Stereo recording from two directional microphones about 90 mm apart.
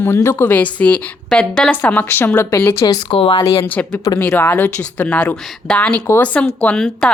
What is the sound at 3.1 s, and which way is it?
Speech, 90° left.